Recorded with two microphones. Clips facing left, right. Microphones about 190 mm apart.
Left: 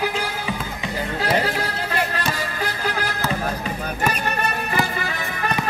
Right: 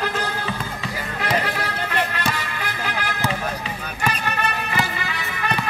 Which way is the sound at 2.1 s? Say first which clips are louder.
Left 1 dB; 40° left (ahead or behind).